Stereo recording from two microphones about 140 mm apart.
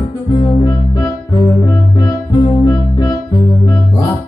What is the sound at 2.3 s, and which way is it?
Music, 25° left (ahead or behind).